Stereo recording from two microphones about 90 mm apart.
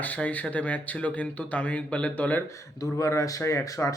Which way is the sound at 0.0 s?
15° left (ahead or behind).